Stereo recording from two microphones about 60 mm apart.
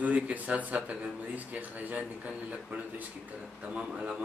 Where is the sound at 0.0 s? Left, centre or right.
Right.